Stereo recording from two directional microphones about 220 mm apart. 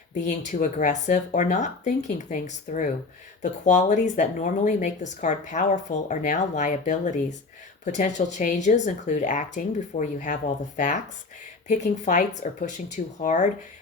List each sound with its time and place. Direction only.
0.1 s speech: 35° left (ahead or behind)